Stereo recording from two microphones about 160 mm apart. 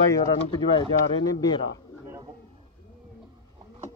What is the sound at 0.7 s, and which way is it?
Speech, 25° left (ahead or behind).